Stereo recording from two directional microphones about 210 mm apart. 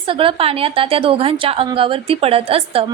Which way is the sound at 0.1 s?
25° right (ahead or behind).